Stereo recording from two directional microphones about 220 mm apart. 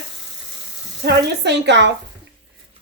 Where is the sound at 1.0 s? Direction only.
50° right (ahead or behind).